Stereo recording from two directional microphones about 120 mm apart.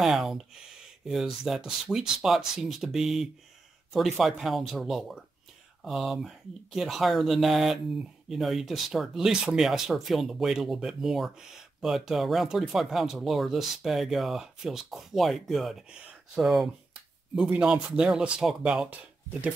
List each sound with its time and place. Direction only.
0.0 s speech: centre (ahead or behind)